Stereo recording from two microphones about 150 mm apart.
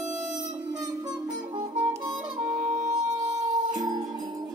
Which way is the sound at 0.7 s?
25° right (ahead or behind).